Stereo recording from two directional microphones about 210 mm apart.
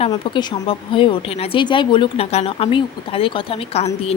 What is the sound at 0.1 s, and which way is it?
Speech, 20° left (ahead or behind).